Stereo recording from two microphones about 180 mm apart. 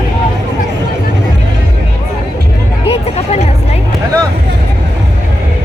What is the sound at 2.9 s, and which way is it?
Hubbub, 35° left (ahead or behind).